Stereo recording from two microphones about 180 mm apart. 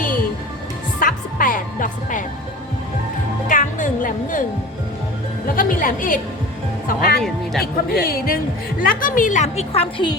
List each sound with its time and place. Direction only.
0.9 s music: 50° left (ahead or behind)
3.5 s music: 45° left (ahead or behind)
5.5 s a woman's voice: 50° left (ahead or behind); by 10.1 s 30° left (ahead or behind)